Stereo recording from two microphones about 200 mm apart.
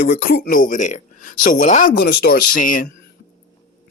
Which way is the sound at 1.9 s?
50° left (ahead or behind).